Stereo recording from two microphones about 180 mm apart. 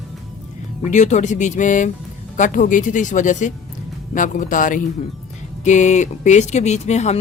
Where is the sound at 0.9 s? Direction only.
40° left (ahead or behind).